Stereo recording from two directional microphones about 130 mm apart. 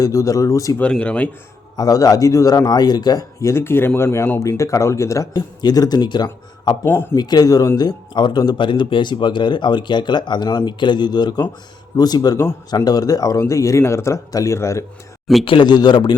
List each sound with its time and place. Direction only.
0.0 s speech: 25° left (ahead or behind)
0.8 s speech: 10° left (ahead or behind)
1.7 s speech: 30° left (ahead or behind)
6.8 s speech: 15° left (ahead or behind)
7.2 s speech: 30° left (ahead or behind)
15.4 s speech: 35° left (ahead or behind)